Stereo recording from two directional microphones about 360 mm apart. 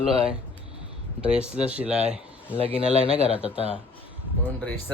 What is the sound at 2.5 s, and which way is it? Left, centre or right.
Speech, centre.